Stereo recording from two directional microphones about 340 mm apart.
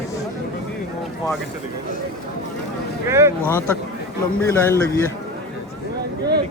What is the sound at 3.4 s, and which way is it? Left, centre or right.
A man's voice, centre.